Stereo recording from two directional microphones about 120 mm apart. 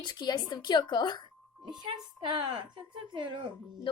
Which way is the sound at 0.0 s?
40° left (ahead or behind).